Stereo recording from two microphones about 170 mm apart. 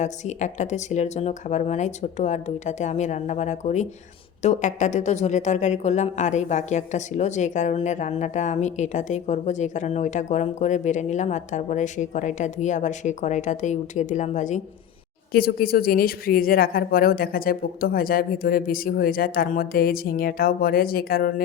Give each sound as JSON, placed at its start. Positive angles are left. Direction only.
{"t": 0.0, "sound": "a woman's voice", "side_deg": 45}
{"t": 15.3, "sound": "speech", "side_deg": 60}